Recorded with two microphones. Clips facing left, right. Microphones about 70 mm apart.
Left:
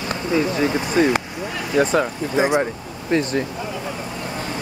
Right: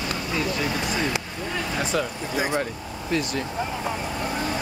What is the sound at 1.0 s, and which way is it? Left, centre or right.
Speech, left.